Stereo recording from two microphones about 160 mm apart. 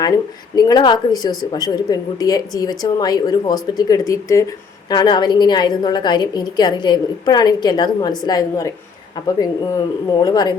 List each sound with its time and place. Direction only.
0.5 s a woman's voice: 25° left (ahead or behind)